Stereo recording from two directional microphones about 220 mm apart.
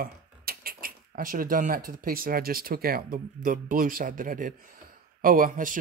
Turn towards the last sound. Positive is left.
turn(degrees=-35)  # may be behind; listen again after turning